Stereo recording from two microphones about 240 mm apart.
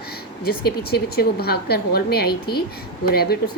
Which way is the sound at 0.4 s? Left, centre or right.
Left.